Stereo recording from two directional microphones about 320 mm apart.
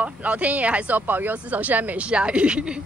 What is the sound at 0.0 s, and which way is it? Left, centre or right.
A woman's voice, centre.